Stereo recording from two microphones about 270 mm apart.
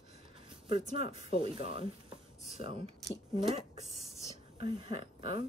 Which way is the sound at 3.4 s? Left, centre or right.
Right.